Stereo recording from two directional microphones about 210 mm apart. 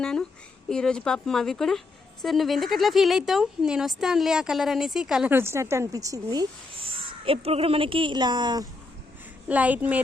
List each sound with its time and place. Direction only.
0.0 s speech: 5° left (ahead or behind); by 8.6 s 20° right (ahead or behind)
9.5 s a woman's voice: 5° right (ahead or behind)